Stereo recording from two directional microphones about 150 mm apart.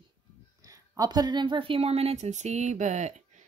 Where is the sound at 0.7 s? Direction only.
25° right (ahead or behind).